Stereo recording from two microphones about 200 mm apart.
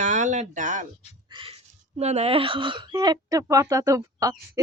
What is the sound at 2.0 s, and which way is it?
Speech, 35° right (ahead or behind).